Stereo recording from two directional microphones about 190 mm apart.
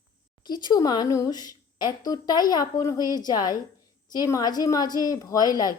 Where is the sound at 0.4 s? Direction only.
20° left (ahead or behind).